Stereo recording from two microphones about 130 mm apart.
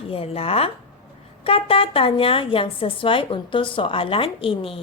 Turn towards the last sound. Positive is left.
turn(degrees=45)  # may be behind; listen again after turning